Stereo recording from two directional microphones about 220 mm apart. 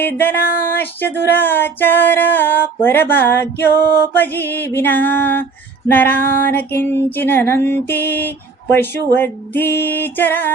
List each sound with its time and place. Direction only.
0.0 s female singing: 10° left (ahead or behind)